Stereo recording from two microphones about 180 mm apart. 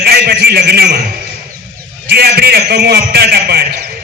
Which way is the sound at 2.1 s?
65° right (ahead or behind).